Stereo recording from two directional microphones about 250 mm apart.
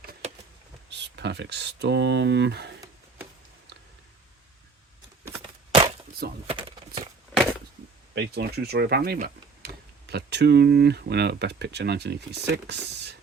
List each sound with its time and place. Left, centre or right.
0.0 s vehicle: right
0.9 s speech: right
5.4 s a sound: right
8.1 s speech: right